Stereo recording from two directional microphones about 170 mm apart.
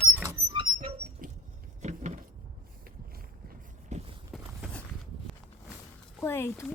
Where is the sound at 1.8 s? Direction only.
45° right (ahead or behind).